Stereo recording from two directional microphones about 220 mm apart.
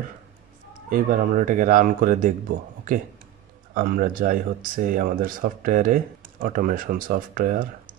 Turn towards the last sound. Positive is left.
turn(degrees=-40)  # may be behind; listen again after turning